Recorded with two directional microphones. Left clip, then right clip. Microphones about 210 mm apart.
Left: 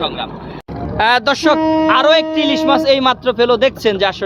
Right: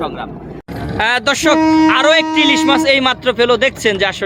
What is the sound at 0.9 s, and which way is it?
Speech, 5° left (ahead or behind).